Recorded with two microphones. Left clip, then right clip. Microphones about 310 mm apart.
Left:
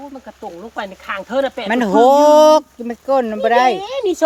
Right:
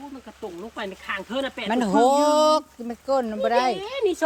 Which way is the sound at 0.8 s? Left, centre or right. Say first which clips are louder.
Left 6 dB; centre.